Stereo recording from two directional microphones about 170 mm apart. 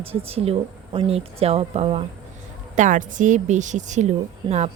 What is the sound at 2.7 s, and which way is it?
Speech, 50° right (ahead or behind).